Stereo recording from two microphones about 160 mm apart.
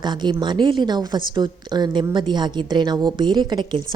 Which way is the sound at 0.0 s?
25° right (ahead or behind).